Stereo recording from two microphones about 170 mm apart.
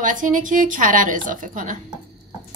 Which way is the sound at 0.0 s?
50° right (ahead or behind).